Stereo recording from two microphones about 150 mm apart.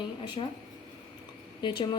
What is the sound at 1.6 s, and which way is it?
Speech, 30° left (ahead or behind).